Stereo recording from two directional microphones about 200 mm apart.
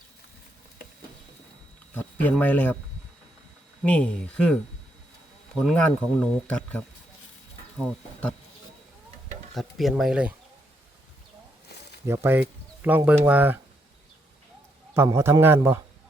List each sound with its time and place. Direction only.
1.9 s speech: 10° left (ahead or behind)
3.8 s speech: 5° left (ahead or behind)
5.5 s speech: 5° left (ahead or behind)
9.6 s speech: centre (ahead or behind)
12.0 s speech: 10° right (ahead or behind)
14.9 s a man's voice: 15° right (ahead or behind)